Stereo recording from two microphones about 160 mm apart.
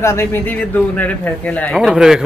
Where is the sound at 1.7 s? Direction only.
5° right (ahead or behind).